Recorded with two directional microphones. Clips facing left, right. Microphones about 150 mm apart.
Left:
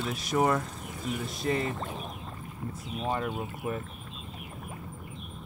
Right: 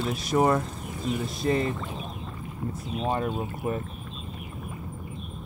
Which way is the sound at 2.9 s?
25° right (ahead or behind).